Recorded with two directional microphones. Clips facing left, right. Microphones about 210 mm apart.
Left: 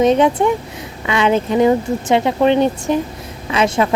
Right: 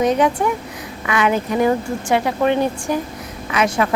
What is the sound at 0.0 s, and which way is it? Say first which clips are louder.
A woman's voice: left 4 dB; 25° left (ahead or behind).